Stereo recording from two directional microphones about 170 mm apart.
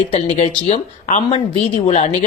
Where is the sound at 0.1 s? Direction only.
40° left (ahead or behind).